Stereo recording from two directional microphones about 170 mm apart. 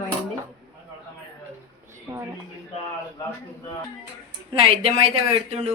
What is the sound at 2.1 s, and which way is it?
Speech, 25° right (ahead or behind).